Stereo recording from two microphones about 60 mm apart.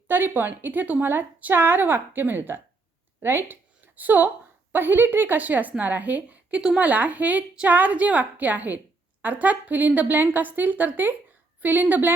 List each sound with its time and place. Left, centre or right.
0.1 s a woman's voice: right
3.2 s a sound: right
4.7 s a woman's voice: right